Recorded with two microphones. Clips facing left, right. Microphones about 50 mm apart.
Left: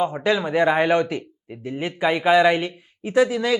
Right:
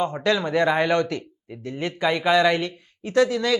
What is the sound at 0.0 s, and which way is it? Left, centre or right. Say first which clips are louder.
Speech: left 1 dB; centre.